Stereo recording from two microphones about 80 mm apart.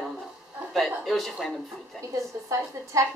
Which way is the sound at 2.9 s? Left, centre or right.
Right.